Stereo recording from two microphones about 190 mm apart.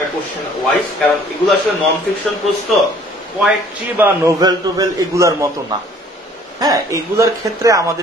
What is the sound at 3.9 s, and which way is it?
Speech, 10° right (ahead or behind).